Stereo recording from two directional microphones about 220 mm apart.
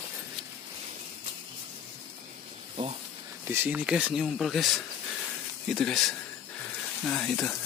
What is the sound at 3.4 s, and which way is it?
Speech, 10° right (ahead or behind).